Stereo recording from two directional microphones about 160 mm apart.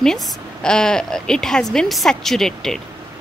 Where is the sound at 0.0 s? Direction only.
5° left (ahead or behind).